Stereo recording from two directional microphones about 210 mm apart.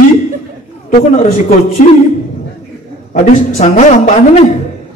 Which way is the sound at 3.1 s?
35° left (ahead or behind).